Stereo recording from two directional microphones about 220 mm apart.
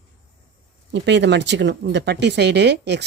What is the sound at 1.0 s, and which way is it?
Speech, 50° right (ahead or behind).